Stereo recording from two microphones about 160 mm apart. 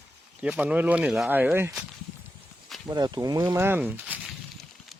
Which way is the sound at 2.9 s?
25° right (ahead or behind).